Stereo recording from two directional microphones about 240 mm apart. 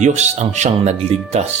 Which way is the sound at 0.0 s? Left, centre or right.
Right.